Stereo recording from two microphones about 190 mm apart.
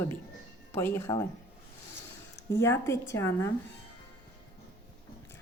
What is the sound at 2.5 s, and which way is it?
Speech, 15° left (ahead or behind).